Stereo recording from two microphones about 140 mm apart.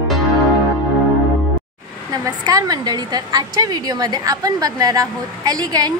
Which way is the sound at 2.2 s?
25° right (ahead or behind).